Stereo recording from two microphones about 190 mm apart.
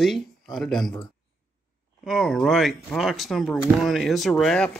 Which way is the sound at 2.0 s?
Centre (ahead or behind).